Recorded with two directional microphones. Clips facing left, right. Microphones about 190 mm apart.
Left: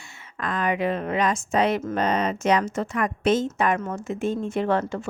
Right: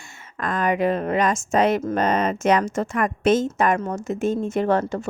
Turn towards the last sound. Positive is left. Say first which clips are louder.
# right 3 dB
turn(degrees=-40)  # may be behind; listen again after turning